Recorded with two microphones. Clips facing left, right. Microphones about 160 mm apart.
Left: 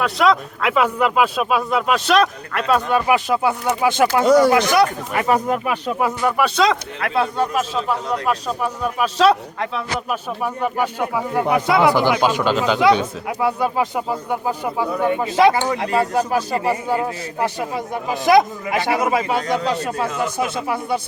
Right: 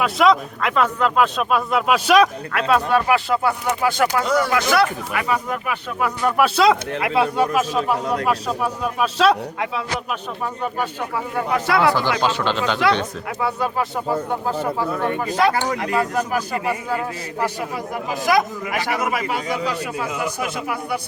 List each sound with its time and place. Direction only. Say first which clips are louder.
0.0 s speech: right 1 dB; centre (ahead or behind)
3.1 s speech: left 1 dB; 15° left (ahead or behind)
4.3 s speech: left 7 dB; 35° left (ahead or behind)
4.5 s speech: left 3 dB; 15° left (ahead or behind)
5.1 s speech: left 6 dB; 45° left (ahead or behind)
5.5 s speech: left 5 dB; 25° left (ahead or behind)
6.2 s speech: right 2 dB; centre (ahead or behind)
10.4 s speech: left 4 dB; 10° left (ahead or behind)
15.3 s speech: left 4 dB; 25° left (ahead or behind)
19.4 s speech: left 4 dB; 5° right (ahead or behind)
20.4 s speech: left 3 dB; 25° left (ahead or behind)